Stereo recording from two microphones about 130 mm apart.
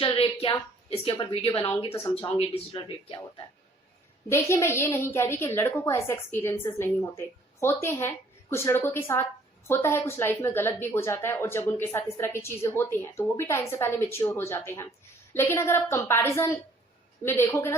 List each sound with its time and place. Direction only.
0.0 s a sound: 50° left (ahead or behind)
0.9 s speech: 45° left (ahead or behind)
1.9 s a woman's voice: 20° left (ahead or behind)
2.3 s speech: 40° left (ahead or behind)
4.3 s a woman's voice: 20° left (ahead or behind)